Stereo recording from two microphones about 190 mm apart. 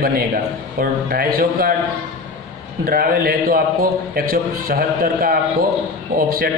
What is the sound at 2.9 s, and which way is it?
A man's voice, 50° right (ahead or behind).